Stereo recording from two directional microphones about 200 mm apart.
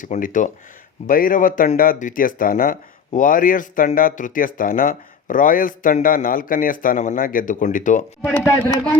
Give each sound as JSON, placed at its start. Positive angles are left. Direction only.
{"t": 0.0, "sound": "speech", "side_deg": 40}
{"t": 8.2, "sound": "speech", "side_deg": 10}